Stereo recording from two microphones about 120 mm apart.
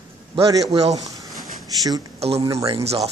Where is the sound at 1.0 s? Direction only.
30° right (ahead or behind).